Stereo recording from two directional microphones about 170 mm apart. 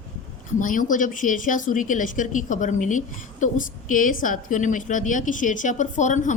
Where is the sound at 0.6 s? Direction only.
50° left (ahead or behind).